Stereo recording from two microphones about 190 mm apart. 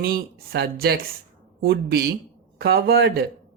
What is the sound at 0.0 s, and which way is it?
A man's voice, 55° right (ahead or behind).